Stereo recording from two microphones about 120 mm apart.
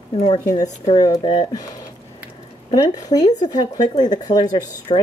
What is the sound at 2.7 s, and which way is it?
Speech, 30° left (ahead or behind).